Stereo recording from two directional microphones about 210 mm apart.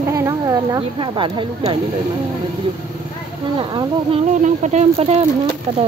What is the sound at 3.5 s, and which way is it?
Speech, 25° right (ahead or behind).